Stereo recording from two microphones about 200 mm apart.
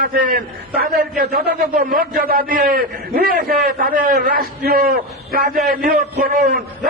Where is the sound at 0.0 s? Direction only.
45° right (ahead or behind).